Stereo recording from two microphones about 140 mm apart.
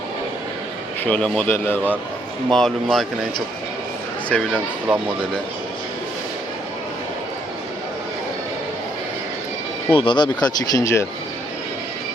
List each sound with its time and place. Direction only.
1.0 s a man's voice: 10° left (ahead or behind)
4.5 s speech: 10° right (ahead or behind)
9.9 s speech: 35° left (ahead or behind)